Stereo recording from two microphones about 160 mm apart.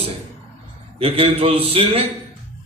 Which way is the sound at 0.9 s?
40° right (ahead or behind).